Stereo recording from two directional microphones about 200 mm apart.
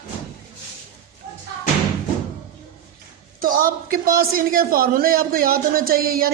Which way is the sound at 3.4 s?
45° right (ahead or behind).